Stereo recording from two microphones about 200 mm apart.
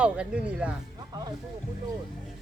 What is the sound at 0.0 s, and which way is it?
Speech, 5° right (ahead or behind).